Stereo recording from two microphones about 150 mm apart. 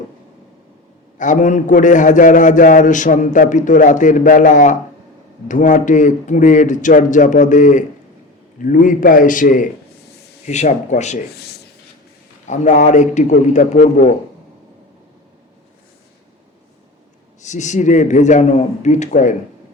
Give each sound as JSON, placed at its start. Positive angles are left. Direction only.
{"t": 1.2, "sound": "a man's voice", "side_deg": 55}
{"t": 10.4, "sound": "a man's voice", "side_deg": 50}
{"t": 11.3, "sound": "writing", "side_deg": 90}
{"t": 12.5, "sound": "a man's voice", "side_deg": 55}
{"t": 17.4, "sound": "a man's voice", "side_deg": 50}